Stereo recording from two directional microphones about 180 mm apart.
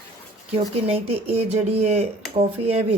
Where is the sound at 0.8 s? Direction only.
35° right (ahead or behind).